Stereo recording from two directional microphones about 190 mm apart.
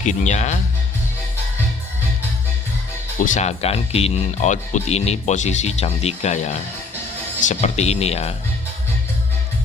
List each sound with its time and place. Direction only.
0.0 s speech: 40° left (ahead or behind)
3.2 s speech: 40° left (ahead or behind)